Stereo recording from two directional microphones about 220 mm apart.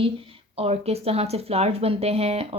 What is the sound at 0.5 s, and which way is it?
Speech, 25° right (ahead or behind).